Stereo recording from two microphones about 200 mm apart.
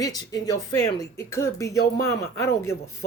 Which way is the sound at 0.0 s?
20° left (ahead or behind).